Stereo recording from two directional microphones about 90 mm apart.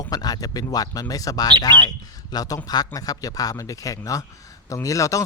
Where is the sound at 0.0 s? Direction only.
45° left (ahead or behind).